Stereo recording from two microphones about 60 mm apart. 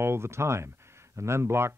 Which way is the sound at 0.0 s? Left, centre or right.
Right.